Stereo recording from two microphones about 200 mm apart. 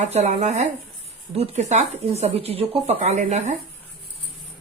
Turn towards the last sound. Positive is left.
turn(degrees=-35)  # may be behind; listen again after turning